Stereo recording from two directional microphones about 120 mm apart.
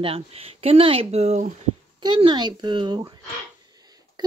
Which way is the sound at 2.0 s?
40° right (ahead or behind).